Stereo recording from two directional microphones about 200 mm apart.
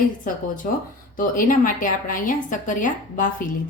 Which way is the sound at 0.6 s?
40° left (ahead or behind).